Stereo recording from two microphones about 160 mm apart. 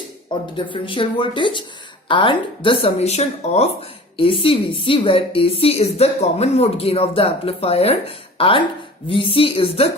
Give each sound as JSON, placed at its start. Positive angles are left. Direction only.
{"t": 0.5, "sound": "speech", "side_deg": 30}